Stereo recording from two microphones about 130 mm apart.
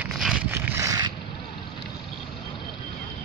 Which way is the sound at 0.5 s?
15° right (ahead or behind).